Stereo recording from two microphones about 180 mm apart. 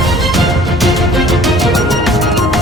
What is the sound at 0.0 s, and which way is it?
Music, centre (ahead or behind).